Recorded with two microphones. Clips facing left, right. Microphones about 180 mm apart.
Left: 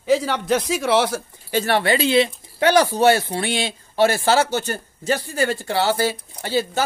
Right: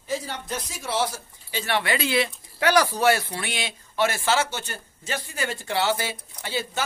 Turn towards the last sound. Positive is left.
turn(degrees=40)  # may be behind; listen again after turning